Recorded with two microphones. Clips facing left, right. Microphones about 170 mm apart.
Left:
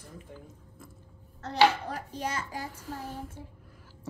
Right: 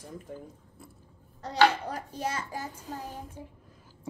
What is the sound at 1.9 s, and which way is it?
Speech, 40° right (ahead or behind).